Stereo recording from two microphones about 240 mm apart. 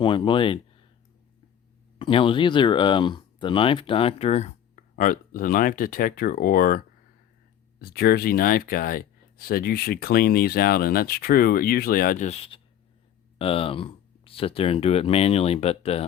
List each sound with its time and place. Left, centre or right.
0.0 s speech: centre
2.0 s speech: left